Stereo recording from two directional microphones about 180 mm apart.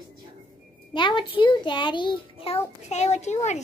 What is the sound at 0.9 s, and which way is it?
A child's voice, 25° left (ahead or behind).